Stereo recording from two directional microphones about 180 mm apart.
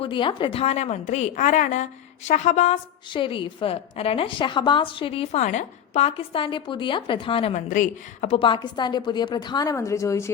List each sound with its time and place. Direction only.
0.0 s a woman's voice: 25° left (ahead or behind)
3.1 s a woman's voice: 30° left (ahead or behind)
7.7 s a woman's voice: 40° left (ahead or behind)
8.4 s a woman's voice: 25° left (ahead or behind)